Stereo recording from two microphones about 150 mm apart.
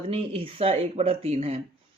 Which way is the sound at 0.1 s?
40° right (ahead or behind).